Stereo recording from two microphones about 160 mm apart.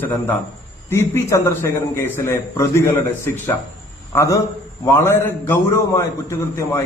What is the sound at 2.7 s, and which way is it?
A man's voice, 15° left (ahead or behind).